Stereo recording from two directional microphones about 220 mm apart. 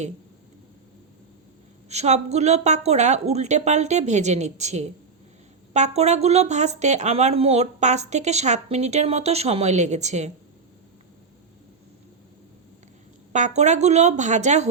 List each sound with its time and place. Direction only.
1.9 s speech: 30° right (ahead or behind)
13.3 s speech: 30° right (ahead or behind)